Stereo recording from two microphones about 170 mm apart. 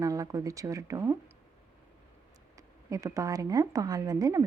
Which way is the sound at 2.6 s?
20° right (ahead or behind).